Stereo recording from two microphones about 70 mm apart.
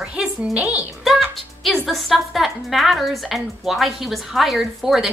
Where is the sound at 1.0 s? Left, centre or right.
Centre.